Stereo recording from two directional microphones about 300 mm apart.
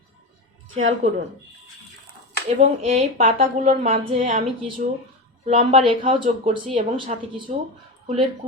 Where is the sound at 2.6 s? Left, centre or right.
Right.